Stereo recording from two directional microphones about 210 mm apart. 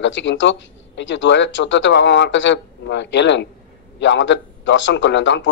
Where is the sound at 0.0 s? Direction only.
60° left (ahead or behind).